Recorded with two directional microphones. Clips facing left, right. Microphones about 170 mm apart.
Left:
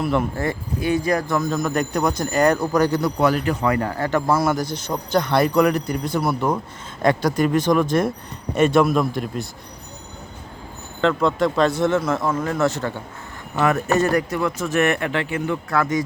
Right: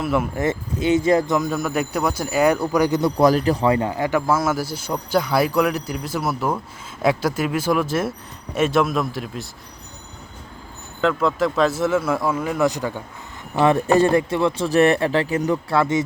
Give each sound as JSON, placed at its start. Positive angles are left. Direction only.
{"t": 0.0, "sound": "speech", "side_deg": -5}
{"t": 0.3, "sound": "speech", "side_deg": -20}
{"t": 1.4, "sound": "a man's voice", "side_deg": -10}
{"t": 3.2, "sound": "speech", "side_deg": -35}
{"t": 4.3, "sound": "a man's voice", "side_deg": -5}
{"t": 11.1, "sound": "a man's voice", "side_deg": -5}
{"t": 13.7, "sound": "speech", "side_deg": -30}